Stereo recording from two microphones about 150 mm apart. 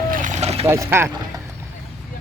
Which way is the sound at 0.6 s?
15° right (ahead or behind).